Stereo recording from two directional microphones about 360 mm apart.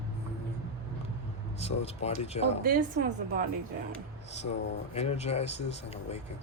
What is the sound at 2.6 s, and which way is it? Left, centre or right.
Speech, right.